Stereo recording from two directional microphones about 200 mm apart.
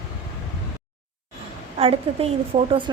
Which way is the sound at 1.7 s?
30° right (ahead or behind).